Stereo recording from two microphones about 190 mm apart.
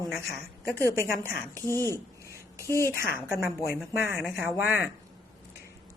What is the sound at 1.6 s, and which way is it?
Speech, 15° left (ahead or behind).